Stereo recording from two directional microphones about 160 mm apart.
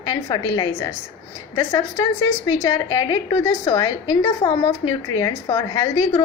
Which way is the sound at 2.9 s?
20° left (ahead or behind).